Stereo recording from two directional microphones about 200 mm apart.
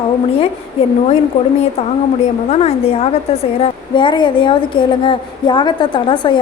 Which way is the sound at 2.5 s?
30° left (ahead or behind).